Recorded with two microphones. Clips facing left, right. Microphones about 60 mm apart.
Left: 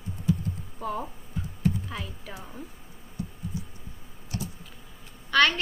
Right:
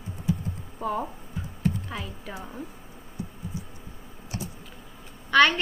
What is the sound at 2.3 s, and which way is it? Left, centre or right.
Speech, right.